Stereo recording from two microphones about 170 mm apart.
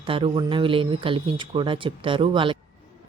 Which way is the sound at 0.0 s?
30° right (ahead or behind).